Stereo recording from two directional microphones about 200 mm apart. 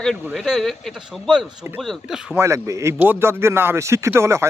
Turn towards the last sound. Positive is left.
turn(degrees=-15)  # may be behind; listen again after turning